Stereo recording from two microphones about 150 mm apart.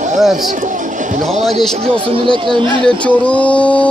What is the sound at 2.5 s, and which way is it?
Speech, 5° left (ahead or behind).